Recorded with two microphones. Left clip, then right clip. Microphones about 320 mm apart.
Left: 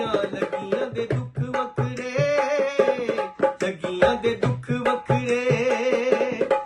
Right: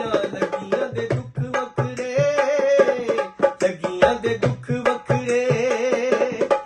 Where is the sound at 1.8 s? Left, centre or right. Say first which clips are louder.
Right 4 dB; centre.